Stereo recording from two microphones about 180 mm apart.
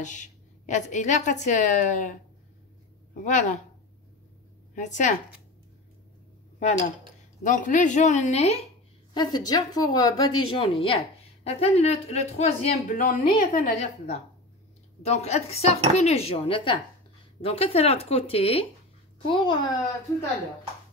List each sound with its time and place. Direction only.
0.0 s a woman's voice: 45° left (ahead or behind)
3.3 s a woman's voice: 40° left (ahead or behind)
4.7 s a woman's voice: 45° left (ahead or behind)
7.4 s a woman's voice: 45° left (ahead or behind)
9.1 s a woman's voice: 25° left (ahead or behind)